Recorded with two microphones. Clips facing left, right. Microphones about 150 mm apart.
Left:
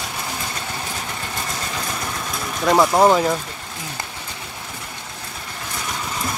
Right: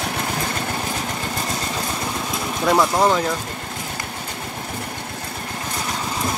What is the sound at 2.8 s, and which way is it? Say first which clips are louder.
Speech: left 4 dB; 20° left (ahead or behind).